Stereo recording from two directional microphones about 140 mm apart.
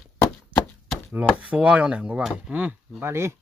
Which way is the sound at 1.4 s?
10° right (ahead or behind).